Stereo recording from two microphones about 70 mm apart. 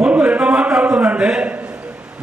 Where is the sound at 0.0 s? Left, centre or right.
Centre.